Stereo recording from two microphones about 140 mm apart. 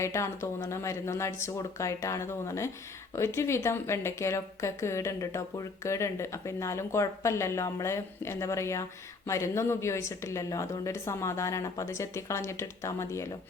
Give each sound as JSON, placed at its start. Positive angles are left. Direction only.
{"t": 0.0, "sound": "a woman's voice", "side_deg": 20}